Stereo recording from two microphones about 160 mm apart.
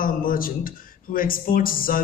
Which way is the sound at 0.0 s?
60° left (ahead or behind).